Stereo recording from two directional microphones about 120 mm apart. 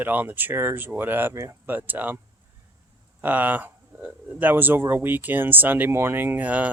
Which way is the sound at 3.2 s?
15° right (ahead or behind).